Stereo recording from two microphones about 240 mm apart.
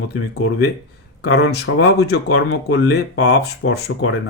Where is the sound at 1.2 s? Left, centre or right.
Left.